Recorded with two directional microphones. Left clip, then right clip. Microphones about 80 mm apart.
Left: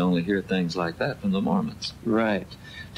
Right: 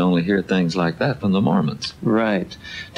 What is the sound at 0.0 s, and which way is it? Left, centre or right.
Speech, left.